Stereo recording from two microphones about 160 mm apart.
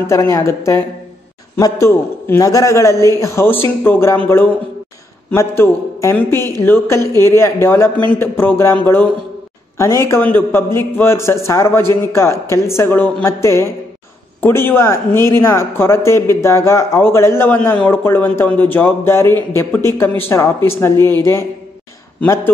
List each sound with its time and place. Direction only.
0.0 s a man's voice: 20° left (ahead or behind)
5.3 s speech: 15° left (ahead or behind)
9.8 s speech: 20° left (ahead or behind)